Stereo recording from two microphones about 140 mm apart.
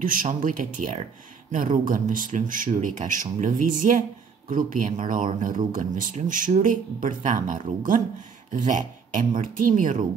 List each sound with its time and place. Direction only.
0.0 s speech: 80° right